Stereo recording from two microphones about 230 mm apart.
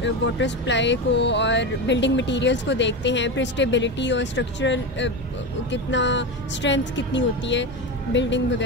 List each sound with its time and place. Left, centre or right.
0.0 s speech: left